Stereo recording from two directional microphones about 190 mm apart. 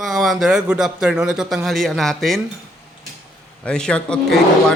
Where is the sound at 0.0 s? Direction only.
Centre (ahead or behind).